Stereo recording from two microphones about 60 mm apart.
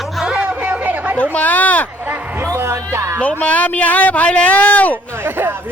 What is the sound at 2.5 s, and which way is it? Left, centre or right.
Speech, right.